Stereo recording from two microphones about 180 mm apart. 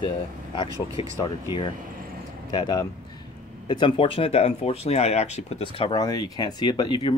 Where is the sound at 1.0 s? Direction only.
30° left (ahead or behind).